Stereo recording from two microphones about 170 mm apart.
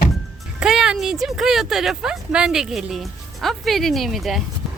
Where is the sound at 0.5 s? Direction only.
5° right (ahead or behind).